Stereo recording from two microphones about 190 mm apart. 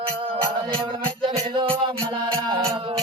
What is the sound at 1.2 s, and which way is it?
Music, 25° right (ahead or behind).